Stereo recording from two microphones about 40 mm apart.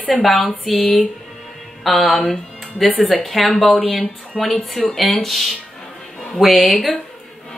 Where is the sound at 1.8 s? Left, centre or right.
Centre.